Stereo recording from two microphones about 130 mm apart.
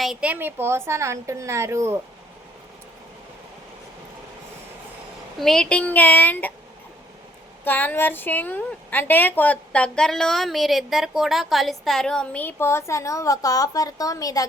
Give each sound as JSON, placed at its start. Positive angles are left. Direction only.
{"t": 0.0, "sound": "a woman's voice", "side_deg": -5}
{"t": 5.4, "sound": "a woman's voice", "side_deg": 5}
{"t": 7.6, "sound": "a woman's voice", "side_deg": 15}